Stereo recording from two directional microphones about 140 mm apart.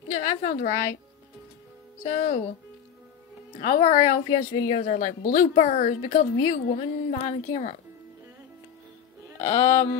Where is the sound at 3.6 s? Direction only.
60° left (ahead or behind).